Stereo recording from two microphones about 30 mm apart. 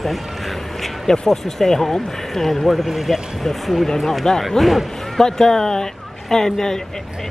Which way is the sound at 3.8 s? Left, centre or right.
Centre.